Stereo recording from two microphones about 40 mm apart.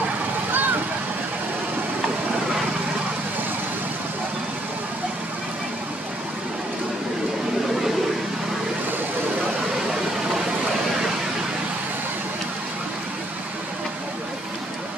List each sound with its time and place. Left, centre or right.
0.5 s vehicle: right